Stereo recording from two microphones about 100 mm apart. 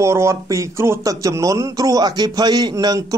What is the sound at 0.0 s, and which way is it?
A man's voice, 30° right (ahead or behind).